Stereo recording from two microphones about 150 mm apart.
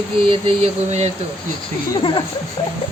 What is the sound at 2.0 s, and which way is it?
Speech, 35° left (ahead or behind).